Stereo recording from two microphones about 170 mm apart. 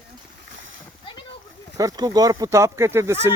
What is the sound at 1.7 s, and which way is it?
Speech, 20° right (ahead or behind).